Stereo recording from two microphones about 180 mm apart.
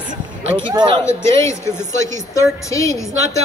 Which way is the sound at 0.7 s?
25° right (ahead or behind).